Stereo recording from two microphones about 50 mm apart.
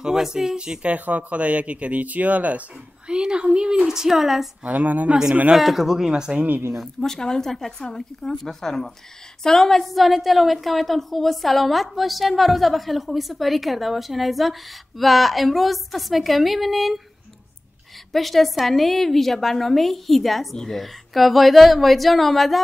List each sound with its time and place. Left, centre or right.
0.0 s a woman's voice: centre
0.8 s speech: right
3.1 s a woman's voice: centre
4.6 s a woman's voice: right
5.6 s a woman's voice: centre
6.3 s a woman's voice: right
6.7 s a woman's voice: centre
18.1 s a woman's voice: centre
20.8 s a woman's voice: centre